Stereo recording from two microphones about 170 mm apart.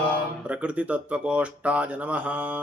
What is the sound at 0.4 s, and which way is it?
Speech, 5° right (ahead or behind).